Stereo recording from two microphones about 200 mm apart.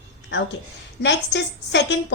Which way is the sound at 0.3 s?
60° left (ahead or behind).